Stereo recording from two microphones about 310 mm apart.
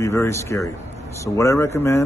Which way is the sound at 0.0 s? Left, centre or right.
Centre.